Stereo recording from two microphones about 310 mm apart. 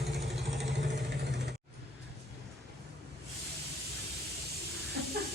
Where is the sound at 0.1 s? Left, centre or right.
Right.